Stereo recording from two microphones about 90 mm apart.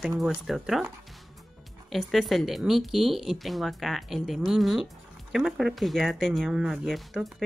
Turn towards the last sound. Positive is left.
turn(degrees=0)  # may be behind; listen again after turning